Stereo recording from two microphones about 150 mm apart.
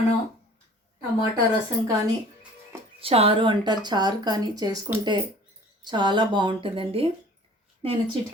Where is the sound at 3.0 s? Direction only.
40° right (ahead or behind).